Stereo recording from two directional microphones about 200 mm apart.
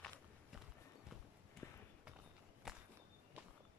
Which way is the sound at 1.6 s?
15° left (ahead or behind).